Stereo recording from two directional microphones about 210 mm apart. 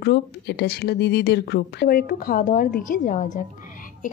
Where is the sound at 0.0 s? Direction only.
55° left (ahead or behind).